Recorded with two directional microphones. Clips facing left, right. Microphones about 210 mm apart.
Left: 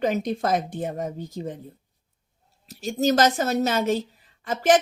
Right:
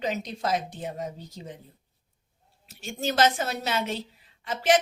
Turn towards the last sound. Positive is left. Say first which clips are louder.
# left 4 dB
turn(degrees=45)  # may be behind; listen again after turning